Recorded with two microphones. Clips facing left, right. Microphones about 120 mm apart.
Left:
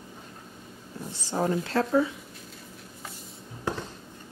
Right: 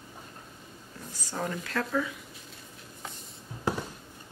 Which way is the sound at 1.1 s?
30° left (ahead or behind).